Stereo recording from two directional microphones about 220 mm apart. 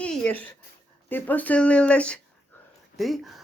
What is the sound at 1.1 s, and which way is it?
Speech, 10° left (ahead or behind).